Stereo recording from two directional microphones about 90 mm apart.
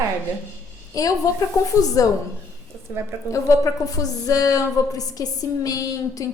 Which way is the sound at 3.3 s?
35° left (ahead or behind).